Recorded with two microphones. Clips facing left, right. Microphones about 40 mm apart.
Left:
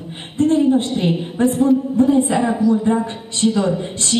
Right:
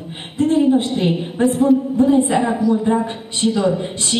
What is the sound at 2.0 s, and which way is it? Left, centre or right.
Speech, right.